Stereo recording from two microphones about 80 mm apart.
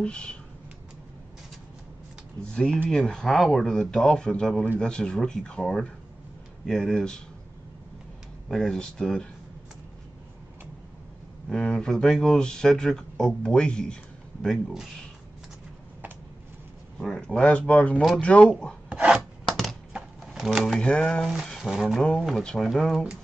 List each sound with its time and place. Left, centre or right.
0.0 s speech: centre
2.4 s speech: centre
8.5 s speech: centre
11.4 s speech: centre
17.0 s speech: centre
18.9 s filing: centre
19.5 s typing: centre
19.9 s a sound: centre
20.7 s speech: centre
21.5 s speech: centre